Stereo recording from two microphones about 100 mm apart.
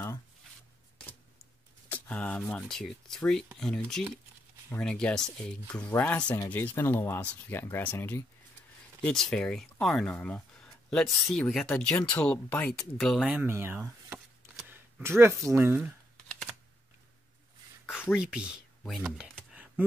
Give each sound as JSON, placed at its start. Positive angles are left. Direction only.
{"t": 1.9, "sound": "speech", "side_deg": 10}
{"t": 5.8, "sound": "speech", "side_deg": 20}
{"t": 12.9, "sound": "speech", "side_deg": 0}
{"t": 13.5, "sound": "speech", "side_deg": -25}
{"t": 16.3, "sound": "computer keyboard", "side_deg": 5}
{"t": 17.8, "sound": "speech", "side_deg": -10}